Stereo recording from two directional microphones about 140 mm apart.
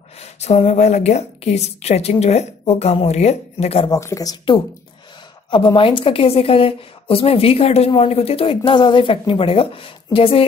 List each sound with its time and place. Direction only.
0.2 s a woman's voice: 50° left (ahead or behind)
3.8 s a woman's voice: 25° left (ahead or behind)
5.8 s a woman's voice: 40° left (ahead or behind)